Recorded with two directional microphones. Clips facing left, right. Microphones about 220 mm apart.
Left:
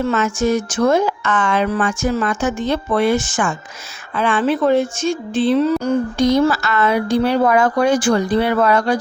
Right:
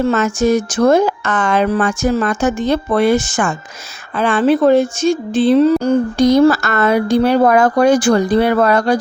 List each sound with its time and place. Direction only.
0.0 s speech: 40° right (ahead or behind)